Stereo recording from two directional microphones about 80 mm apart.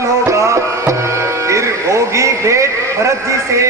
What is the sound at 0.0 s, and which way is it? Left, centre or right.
Tabla, right.